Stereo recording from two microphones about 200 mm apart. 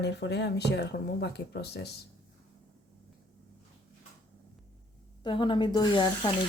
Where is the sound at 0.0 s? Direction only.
60° left (ahead or behind).